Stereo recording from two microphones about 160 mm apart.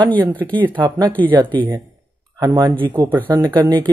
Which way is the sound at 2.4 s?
25° right (ahead or behind).